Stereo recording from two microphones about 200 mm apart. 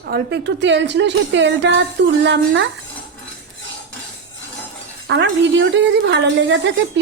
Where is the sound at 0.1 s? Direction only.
55° right (ahead or behind).